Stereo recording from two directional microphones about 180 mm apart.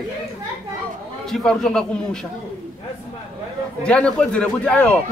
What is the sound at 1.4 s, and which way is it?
Speech, 5° left (ahead or behind).